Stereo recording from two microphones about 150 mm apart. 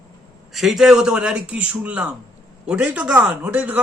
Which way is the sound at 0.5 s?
Centre (ahead or behind).